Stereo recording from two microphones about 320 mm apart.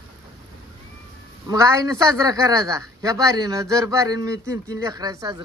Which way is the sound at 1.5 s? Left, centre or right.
Centre.